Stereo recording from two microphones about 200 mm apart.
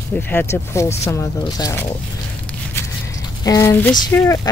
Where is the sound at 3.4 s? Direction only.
15° left (ahead or behind).